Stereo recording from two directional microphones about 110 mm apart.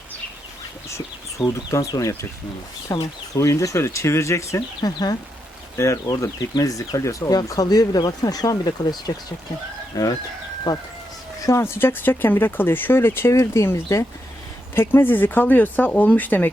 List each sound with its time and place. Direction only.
0.9 s speech: 25° left (ahead or behind)
11.4 s speech: 25° left (ahead or behind)